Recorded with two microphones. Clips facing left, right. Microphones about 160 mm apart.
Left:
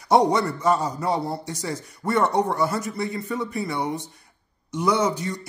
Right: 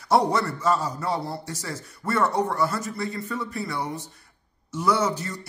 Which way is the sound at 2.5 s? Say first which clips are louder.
Left 2 dB; 20° left (ahead or behind).